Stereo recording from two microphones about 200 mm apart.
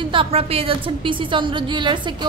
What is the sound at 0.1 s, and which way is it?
A woman's voice, 30° right (ahead or behind).